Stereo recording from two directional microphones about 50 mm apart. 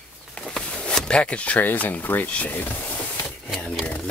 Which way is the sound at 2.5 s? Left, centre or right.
Left.